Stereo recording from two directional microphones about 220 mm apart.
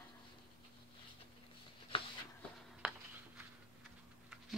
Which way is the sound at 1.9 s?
25° left (ahead or behind).